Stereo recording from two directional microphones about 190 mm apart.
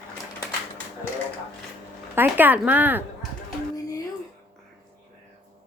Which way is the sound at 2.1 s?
10° right (ahead or behind).